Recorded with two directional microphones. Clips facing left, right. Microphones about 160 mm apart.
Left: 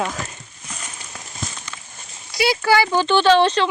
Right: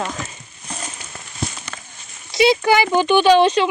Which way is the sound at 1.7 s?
55° right (ahead or behind).